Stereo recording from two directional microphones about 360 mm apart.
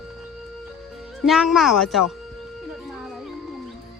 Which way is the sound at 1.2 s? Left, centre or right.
Centre.